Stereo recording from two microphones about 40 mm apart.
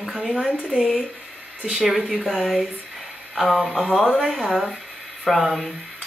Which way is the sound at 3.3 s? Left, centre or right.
Centre.